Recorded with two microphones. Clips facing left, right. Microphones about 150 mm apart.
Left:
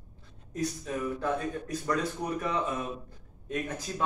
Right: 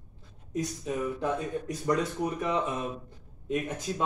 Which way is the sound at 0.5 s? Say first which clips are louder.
Right 1 dB; 20° right (ahead or behind).